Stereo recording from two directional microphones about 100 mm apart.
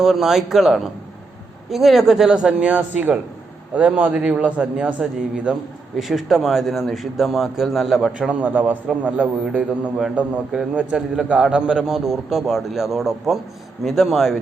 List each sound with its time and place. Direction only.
0.0 s a man's voice: 5° right (ahead or behind)
8.3 s a man's voice: 15° right (ahead or behind)